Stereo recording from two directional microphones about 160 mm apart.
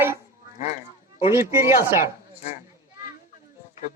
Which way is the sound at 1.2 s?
15° right (ahead or behind).